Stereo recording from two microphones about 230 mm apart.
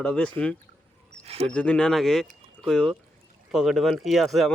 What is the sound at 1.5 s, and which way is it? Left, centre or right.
Speech, centre.